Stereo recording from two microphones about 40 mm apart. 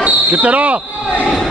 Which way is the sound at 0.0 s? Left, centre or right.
Right.